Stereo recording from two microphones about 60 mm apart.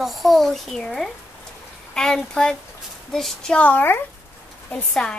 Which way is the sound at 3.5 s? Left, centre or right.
Left.